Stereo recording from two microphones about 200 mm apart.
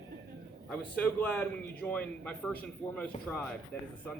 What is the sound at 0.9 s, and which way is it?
A man's voice, 5° left (ahead or behind).